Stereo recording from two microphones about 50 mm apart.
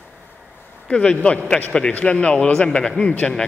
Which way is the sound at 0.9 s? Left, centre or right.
Left.